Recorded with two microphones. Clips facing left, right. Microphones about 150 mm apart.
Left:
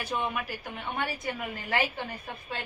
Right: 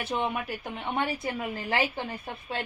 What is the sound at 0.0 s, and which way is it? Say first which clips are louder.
A woman's voice: right 2 dB; 25° right (ahead or behind).